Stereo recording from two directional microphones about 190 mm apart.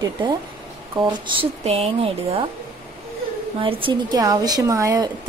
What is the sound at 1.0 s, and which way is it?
Speech, 25° right (ahead or behind).